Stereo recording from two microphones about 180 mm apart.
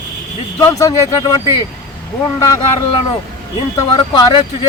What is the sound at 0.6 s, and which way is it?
Speech, 15° left (ahead or behind).